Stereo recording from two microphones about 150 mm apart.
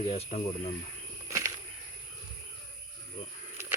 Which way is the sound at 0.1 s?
45° left (ahead or behind).